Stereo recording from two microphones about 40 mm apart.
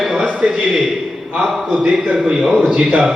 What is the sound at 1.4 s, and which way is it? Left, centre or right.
A man's voice, centre.